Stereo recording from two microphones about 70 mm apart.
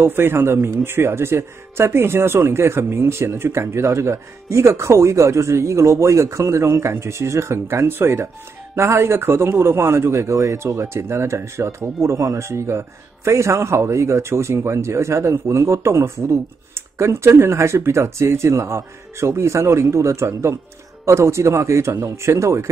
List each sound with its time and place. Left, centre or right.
0.0 s speech: right